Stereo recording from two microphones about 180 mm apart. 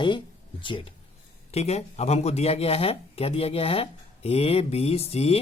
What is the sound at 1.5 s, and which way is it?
Speech, 35° left (ahead or behind).